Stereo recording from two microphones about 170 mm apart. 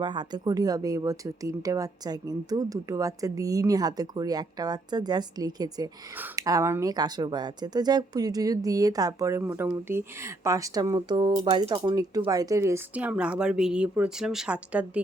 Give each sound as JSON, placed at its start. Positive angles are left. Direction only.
{"t": 0.0, "sound": "speech", "side_deg": -25}